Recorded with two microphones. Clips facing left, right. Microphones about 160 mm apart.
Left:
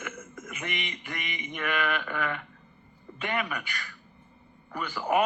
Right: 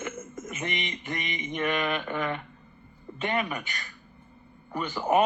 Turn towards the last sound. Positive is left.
turn(degrees=-25)  # may be behind; listen again after turning